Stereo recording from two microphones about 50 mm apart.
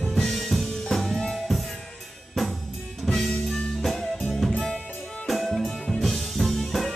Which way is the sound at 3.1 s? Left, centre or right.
Centre.